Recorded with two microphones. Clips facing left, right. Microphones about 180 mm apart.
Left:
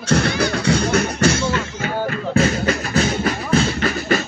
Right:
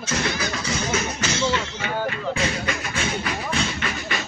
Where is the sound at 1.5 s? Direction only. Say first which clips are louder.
Left 3 dB; 45° left (ahead or behind).